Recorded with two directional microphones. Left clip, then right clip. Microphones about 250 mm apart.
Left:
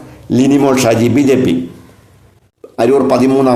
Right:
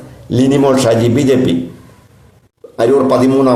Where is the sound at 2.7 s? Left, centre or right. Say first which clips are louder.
Even; left.